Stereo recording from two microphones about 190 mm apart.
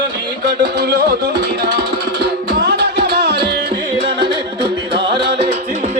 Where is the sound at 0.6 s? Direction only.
60° right (ahead or behind).